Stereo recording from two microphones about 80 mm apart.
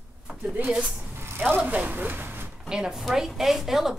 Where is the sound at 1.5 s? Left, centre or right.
Centre.